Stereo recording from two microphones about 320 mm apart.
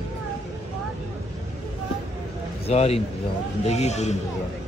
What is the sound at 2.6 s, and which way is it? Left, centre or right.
A man's voice, centre.